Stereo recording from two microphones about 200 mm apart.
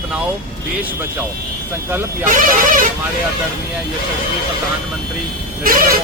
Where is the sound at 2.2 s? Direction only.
40° right (ahead or behind).